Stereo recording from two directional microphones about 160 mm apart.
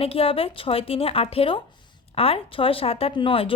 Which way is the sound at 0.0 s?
35° left (ahead or behind).